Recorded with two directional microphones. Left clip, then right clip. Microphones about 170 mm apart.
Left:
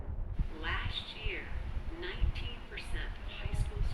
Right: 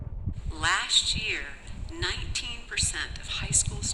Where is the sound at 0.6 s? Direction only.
65° right (ahead or behind).